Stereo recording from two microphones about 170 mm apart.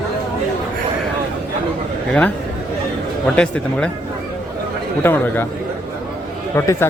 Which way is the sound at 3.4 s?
5° left (ahead or behind).